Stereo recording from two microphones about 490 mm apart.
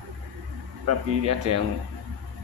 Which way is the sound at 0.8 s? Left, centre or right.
Right.